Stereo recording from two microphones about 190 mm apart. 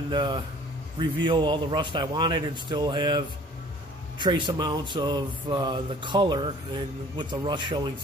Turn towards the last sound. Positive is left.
turn(degrees=-25)  # may be behind; listen again after turning